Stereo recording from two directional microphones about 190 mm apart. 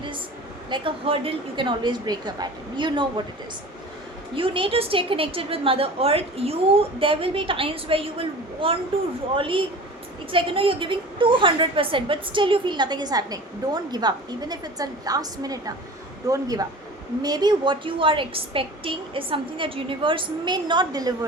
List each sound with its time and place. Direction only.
0.7 s a woman's voice: 30° right (ahead or behind)
4.4 s a woman's voice: 25° right (ahead or behind)